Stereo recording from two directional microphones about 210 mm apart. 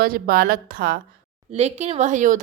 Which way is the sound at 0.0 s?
45° right (ahead or behind).